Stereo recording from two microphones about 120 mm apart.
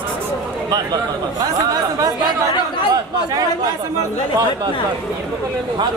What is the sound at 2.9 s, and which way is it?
Chatter, 30° right (ahead or behind).